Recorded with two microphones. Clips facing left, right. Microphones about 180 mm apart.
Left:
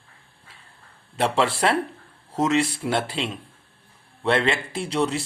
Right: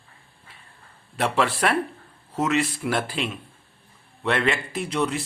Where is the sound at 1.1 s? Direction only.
25° left (ahead or behind).